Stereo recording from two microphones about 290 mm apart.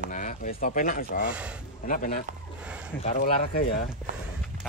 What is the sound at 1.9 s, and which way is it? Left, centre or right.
Speech, left.